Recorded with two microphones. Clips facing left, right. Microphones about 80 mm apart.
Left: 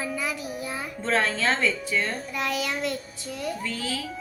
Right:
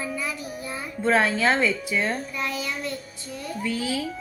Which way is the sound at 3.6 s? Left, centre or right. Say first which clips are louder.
Right 4 dB; centre.